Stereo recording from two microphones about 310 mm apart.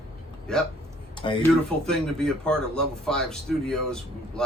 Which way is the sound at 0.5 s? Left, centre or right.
Centre.